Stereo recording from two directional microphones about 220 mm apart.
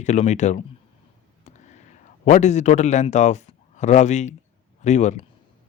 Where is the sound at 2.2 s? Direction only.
30° left (ahead or behind).